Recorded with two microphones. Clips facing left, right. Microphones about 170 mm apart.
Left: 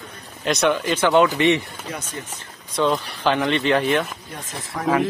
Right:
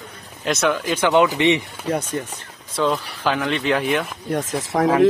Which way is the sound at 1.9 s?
60° right (ahead or behind).